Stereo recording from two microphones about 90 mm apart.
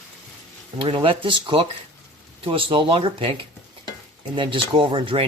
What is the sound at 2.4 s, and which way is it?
Speech, 85° right.